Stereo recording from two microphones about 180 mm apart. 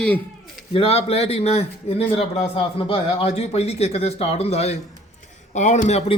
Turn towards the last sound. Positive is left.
turn(degrees=40)  # may be behind; listen again after turning